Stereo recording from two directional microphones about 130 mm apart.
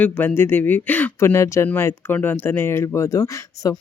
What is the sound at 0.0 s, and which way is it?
Speech, 15° left (ahead or behind).